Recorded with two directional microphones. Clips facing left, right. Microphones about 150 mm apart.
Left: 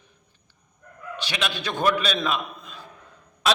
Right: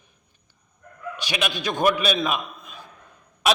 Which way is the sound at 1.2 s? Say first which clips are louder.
Right 2 dB; 15° right (ahead or behind).